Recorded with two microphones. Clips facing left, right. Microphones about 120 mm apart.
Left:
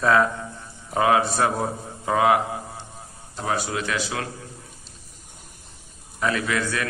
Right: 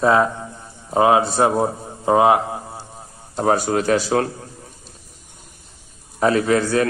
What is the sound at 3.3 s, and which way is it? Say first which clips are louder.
Speech: right 8 dB; 45° right (ahead or behind).